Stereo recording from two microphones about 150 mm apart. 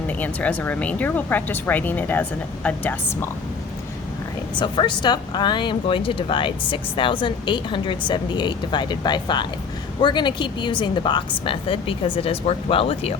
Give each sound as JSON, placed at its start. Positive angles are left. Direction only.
{"t": 0.1, "sound": "speech", "side_deg": 10}
{"t": 4.6, "sound": "speech", "side_deg": 35}